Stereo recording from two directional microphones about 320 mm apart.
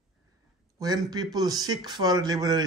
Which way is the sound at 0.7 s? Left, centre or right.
Centre.